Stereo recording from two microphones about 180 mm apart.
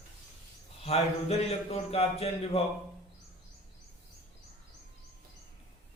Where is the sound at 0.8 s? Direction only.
35° left (ahead or behind).